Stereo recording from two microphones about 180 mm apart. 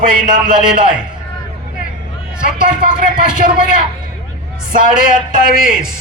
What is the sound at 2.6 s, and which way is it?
Speech, 50° right (ahead or behind).